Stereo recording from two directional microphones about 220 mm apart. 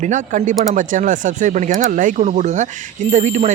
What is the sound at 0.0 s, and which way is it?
Speech, 35° right (ahead or behind).